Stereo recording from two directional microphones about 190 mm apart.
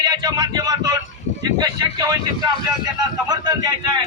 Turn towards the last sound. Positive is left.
turn(degrees=-20)  # may be behind; listen again after turning